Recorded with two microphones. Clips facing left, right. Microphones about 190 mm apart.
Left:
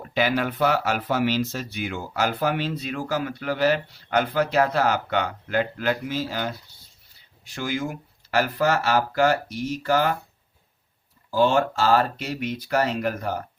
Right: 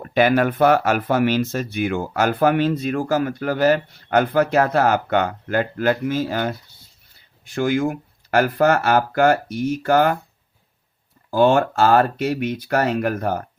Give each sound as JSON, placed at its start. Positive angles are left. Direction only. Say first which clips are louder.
{"t": 0.0, "sound": "speech", "louder": "right 7 dB", "side_deg": -55}
{"t": 11.3, "sound": "speech", "louder": "right 4 dB", "side_deg": -55}